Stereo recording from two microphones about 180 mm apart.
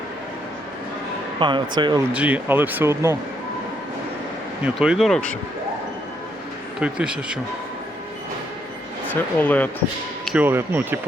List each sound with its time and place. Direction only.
1.4 s speech: 25° right (ahead or behind)
2.1 s speech: 10° right (ahead or behind)
4.6 s speech: 5° right (ahead or behind)
6.7 s speech: 5° right (ahead or behind)
9.4 s speech: 10° left (ahead or behind)
10.2 s speech: 10° right (ahead or behind)